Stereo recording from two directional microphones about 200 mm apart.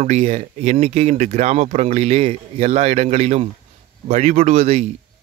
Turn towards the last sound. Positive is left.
turn(degrees=-35)  # may be behind; listen again after turning